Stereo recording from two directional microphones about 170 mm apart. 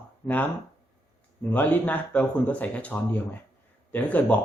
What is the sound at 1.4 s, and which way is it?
Speech, 10° left (ahead or behind).